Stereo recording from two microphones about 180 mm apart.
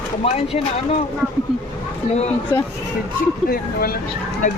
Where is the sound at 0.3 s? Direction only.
35° left (ahead or behind).